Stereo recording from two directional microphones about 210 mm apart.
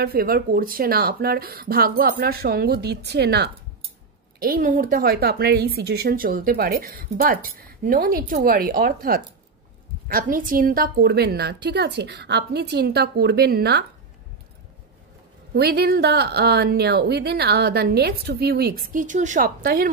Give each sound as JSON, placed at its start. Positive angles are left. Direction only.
{"t": 0.0, "sound": "speech", "side_deg": -45}
{"t": 15.5, "sound": "speech", "side_deg": -50}